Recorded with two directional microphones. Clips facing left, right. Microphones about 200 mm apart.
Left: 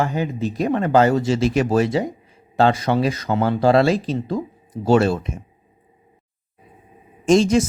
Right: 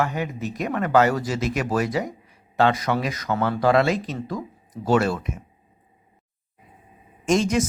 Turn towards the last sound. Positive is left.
turn(degrees=30)  # may be behind; listen again after turning